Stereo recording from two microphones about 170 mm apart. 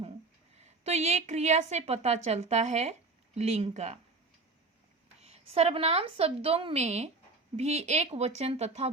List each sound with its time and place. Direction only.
0.5 s a woman's voice: 40° right (ahead or behind)
5.2 s a woman's voice: 35° right (ahead or behind)